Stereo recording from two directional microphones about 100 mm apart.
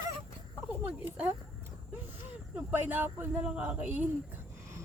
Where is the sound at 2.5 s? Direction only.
20° right (ahead or behind).